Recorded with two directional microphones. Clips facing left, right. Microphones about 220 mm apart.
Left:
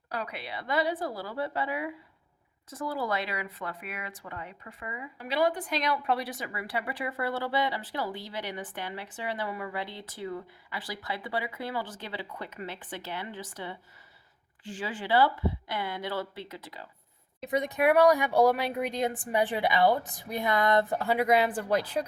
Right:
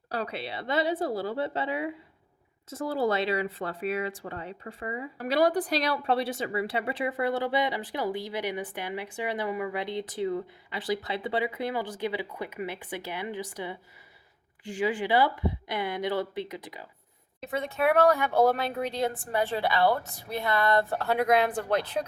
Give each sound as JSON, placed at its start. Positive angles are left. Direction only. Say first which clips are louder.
{"t": 0.1, "sound": "speech", "louder": "right 4 dB", "side_deg": -30}
{"t": 17.5, "sound": "speech", "louder": "left 1 dB", "side_deg": 15}